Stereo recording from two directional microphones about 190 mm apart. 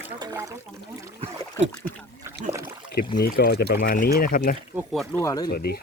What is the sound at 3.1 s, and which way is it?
Speech, 55° left (ahead or behind).